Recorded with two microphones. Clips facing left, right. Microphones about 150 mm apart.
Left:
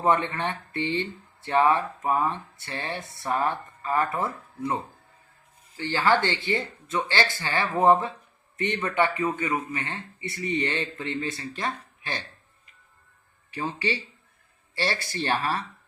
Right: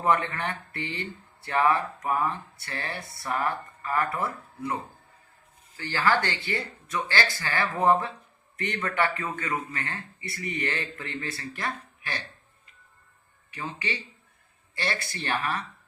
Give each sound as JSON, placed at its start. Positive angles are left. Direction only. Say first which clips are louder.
{"t": 0.0, "sound": "speech", "louder": "left 2 dB", "side_deg": 25}
{"t": 5.7, "sound": "speech", "louder": "left 2 dB", "side_deg": 25}
{"t": 13.5, "sound": "speech", "louder": "left 5 dB", "side_deg": 30}